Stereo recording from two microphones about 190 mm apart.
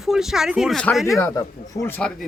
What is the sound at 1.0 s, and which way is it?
Speech, 15° left (ahead or behind).